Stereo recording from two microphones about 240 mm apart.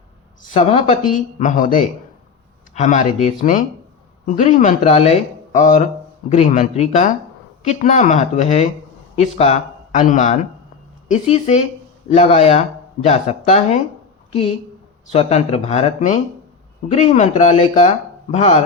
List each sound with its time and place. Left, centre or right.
0.6 s speech: left
15.1 s speech: left